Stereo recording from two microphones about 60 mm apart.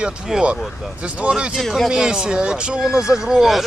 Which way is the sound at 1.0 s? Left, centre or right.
Right.